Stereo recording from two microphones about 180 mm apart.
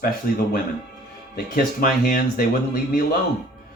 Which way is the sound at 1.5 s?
50° left (ahead or behind).